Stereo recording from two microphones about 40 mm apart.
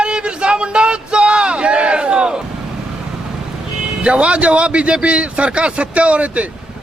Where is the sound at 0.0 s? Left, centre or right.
Right.